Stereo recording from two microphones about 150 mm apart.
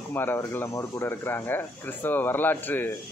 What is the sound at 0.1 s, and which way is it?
Speech, 15° left (ahead or behind).